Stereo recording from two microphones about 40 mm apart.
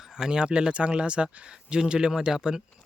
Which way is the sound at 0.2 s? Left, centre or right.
Right.